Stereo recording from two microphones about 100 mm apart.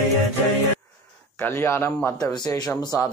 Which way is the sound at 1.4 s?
25° left (ahead or behind).